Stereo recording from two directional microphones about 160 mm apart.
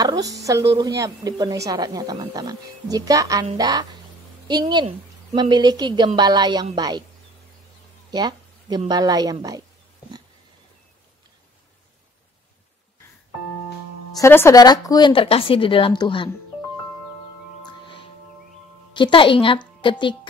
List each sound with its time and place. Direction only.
0.0 s speech: 25° right (ahead or behind)
8.1 s a woman's voice: 25° right (ahead or behind)
14.1 s speech: 15° left (ahead or behind)
17.6 s music: 30° left (ahead or behind)
18.9 s a woman's voice: 30° left (ahead or behind)